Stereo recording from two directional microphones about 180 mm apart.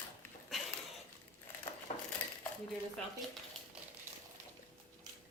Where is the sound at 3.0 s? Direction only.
5° left (ahead or behind).